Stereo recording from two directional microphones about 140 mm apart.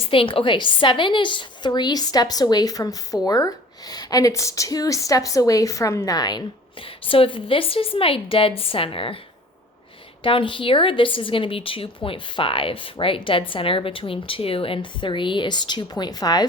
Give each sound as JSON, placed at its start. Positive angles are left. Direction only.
{"t": 0.0, "sound": "a woman's voice", "side_deg": 40}
{"t": 6.8, "sound": "a woman's voice", "side_deg": 40}
{"t": 10.2, "sound": "a woman's voice", "side_deg": 40}